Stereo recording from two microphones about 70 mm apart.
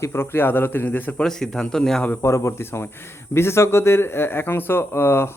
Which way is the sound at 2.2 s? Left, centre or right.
Left.